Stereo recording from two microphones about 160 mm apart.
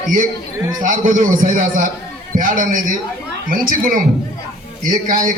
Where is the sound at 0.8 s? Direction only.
55° right (ahead or behind).